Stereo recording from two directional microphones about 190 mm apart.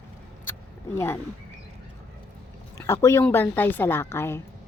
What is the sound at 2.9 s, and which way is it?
Speech, 15° left (ahead or behind).